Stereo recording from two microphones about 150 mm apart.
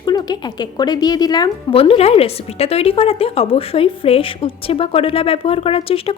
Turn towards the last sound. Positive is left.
turn(degrees=40)  # may be behind; listen again after turning